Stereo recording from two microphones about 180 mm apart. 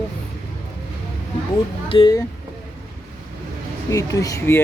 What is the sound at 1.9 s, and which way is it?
Speech, 25° left (ahead or behind).